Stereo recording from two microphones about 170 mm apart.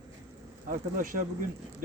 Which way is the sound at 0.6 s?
50° right (ahead or behind).